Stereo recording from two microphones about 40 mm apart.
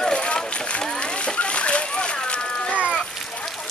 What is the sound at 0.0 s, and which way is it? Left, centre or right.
Splash, left.